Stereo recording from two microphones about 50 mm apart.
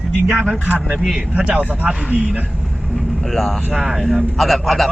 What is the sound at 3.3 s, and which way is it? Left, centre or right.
A man's voice, centre.